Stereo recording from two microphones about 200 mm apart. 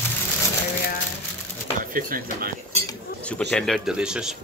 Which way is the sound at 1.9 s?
45° right (ahead or behind).